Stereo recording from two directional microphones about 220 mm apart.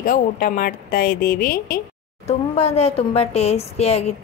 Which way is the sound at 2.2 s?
30° left (ahead or behind).